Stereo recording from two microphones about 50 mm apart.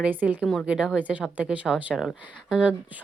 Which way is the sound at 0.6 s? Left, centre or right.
Right.